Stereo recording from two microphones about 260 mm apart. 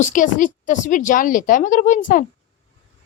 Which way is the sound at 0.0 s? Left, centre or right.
Left.